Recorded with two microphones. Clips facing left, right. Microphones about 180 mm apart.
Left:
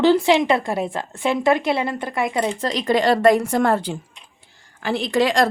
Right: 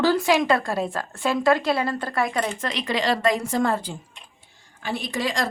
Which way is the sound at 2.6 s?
40° left (ahead or behind).